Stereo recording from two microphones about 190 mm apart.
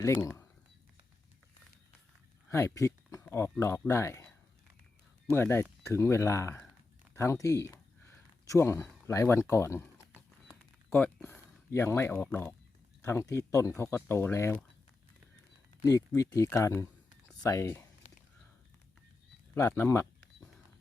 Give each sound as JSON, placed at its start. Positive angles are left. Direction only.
{"t": 0.0, "sound": "speech", "side_deg": 15}
{"t": 2.5, "sound": "speech", "side_deg": 15}
{"t": 5.3, "sound": "speech", "side_deg": 15}
{"t": 10.2, "sound": "typing", "side_deg": 5}
{"t": 11.3, "sound": "speech", "side_deg": 15}
{"t": 15.8, "sound": "speech", "side_deg": 15}
{"t": 19.5, "sound": "speech", "side_deg": 15}